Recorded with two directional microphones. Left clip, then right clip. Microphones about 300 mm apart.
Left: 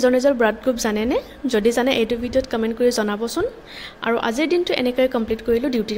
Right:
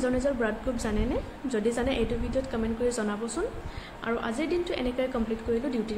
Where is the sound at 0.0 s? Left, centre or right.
Left.